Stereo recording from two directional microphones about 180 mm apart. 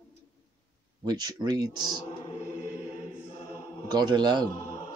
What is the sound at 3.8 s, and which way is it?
Speech, 25° right (ahead or behind).